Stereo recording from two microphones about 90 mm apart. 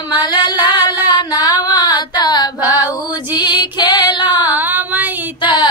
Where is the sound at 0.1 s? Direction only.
55° left (ahead or behind).